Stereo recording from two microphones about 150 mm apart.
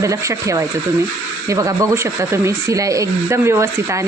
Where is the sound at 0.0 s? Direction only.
20° right (ahead or behind).